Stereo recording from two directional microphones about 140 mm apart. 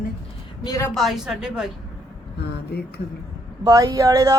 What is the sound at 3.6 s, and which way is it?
Speech, 25° right (ahead or behind).